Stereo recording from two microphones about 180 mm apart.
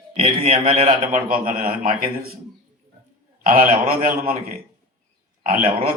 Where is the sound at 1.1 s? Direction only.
50° right (ahead or behind).